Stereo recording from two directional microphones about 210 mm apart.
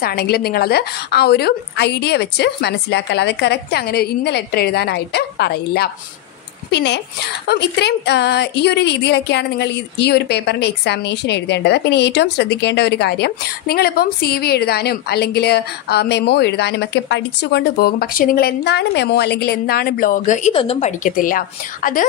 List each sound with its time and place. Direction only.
0.0 s a woman's voice: 45° left (ahead or behind)